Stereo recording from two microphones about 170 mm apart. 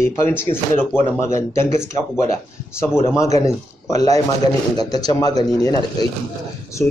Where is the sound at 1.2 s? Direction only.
15° left (ahead or behind).